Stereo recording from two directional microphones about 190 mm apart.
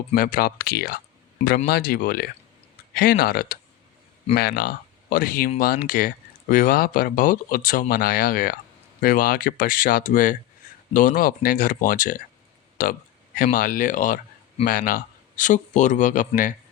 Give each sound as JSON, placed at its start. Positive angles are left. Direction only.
{"t": 0.1, "sound": "speech", "side_deg": 50}